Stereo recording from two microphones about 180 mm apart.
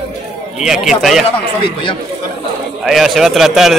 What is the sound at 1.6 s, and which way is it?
Speech, 25° left (ahead or behind).